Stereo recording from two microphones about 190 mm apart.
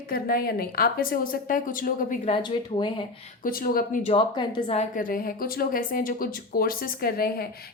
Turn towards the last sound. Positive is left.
turn(degrees=50)  # may be behind; listen again after turning